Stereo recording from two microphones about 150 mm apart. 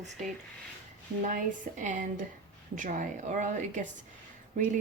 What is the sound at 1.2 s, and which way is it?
Speech, 60° right (ahead or behind).